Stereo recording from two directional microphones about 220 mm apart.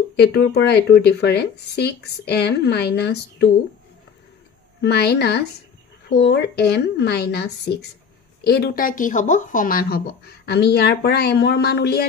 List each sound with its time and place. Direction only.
0.1 s speech: 50° left (ahead or behind)
4.8 s speech: 50° left (ahead or behind)